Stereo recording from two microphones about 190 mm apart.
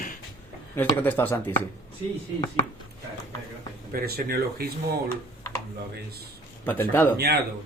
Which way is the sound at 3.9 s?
50° right (ahead or behind).